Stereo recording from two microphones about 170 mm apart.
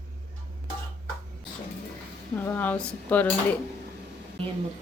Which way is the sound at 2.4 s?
10° left (ahead or behind).